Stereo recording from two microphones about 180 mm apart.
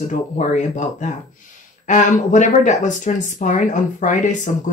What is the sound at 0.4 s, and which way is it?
Speech, 45° left (ahead or behind).